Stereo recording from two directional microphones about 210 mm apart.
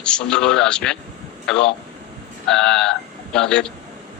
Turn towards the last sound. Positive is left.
turn(degrees=5)  # may be behind; listen again after turning